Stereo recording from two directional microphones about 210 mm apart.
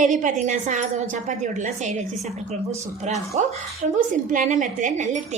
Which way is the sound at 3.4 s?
35° right (ahead or behind).